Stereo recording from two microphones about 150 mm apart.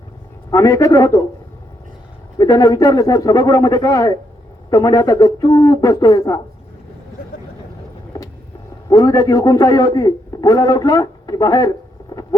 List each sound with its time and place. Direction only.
0.5 s a man's voice: 20° left (ahead or behind)
2.4 s a man's voice: 25° left (ahead or behind)
8.9 s a man's voice: 25° left (ahead or behind)
12.1 s boat: 20° left (ahead or behind)